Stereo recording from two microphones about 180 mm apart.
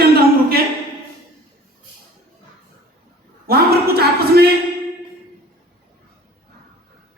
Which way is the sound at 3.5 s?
60° right (ahead or behind).